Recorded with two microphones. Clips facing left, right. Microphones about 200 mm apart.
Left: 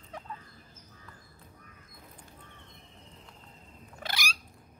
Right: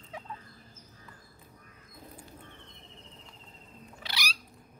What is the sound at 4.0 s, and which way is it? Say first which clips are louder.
Cat: left 3 dB; 50° left (ahead or behind).